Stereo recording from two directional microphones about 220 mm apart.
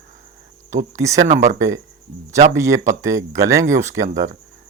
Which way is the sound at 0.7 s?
15° right (ahead or behind).